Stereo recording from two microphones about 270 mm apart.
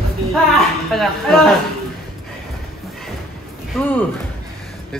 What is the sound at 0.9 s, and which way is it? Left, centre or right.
Speech, centre.